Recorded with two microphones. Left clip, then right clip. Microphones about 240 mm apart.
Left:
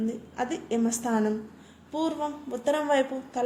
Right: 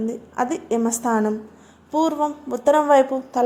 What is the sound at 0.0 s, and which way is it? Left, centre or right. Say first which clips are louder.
A woman's voice: right 7 dB; right.